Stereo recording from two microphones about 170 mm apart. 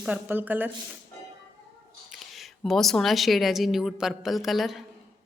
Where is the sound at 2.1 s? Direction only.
Centre (ahead or behind).